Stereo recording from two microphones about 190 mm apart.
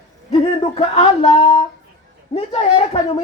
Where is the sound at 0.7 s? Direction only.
35° left (ahead or behind).